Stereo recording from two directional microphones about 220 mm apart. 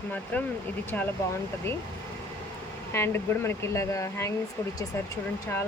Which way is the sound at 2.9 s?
10° left (ahead or behind).